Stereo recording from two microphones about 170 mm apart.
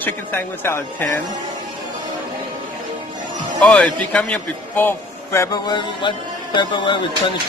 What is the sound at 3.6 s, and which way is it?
A man's voice, 5° left (ahead or behind).